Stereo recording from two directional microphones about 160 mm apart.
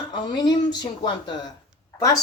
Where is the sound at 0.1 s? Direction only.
30° left (ahead or behind).